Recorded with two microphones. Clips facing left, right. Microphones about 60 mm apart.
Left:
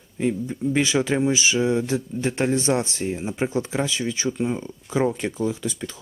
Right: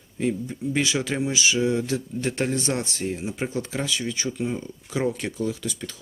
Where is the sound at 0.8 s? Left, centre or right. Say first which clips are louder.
Left 5 dB; left.